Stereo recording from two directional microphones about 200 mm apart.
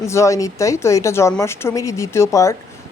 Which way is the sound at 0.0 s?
15° left (ahead or behind).